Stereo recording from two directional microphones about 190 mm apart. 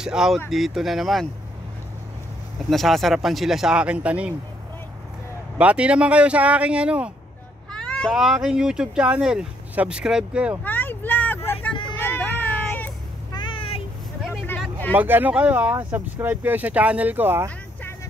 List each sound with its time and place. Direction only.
0.0 s speech: 5° right (ahead or behind)
2.7 s speech: centre (ahead or behind)
5.6 s speech: 5° right (ahead or behind)
7.7 s speech: 5° left (ahead or behind)
10.6 s vehicle: 10° left (ahead or behind)
13.3 s a sound: 25° left (ahead or behind)
14.2 s vehicle: 5° left (ahead or behind)
15.0 s speech: 10° right (ahead or behind)